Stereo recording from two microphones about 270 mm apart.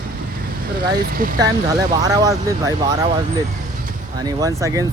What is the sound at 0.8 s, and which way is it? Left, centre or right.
Speech, right.